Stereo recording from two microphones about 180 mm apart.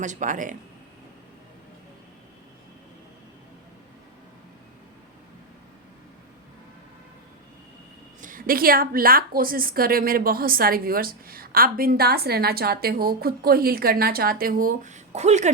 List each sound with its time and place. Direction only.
0.0 s speech: 45° right (ahead or behind)
8.2 s a woman's voice: 50° right (ahead or behind)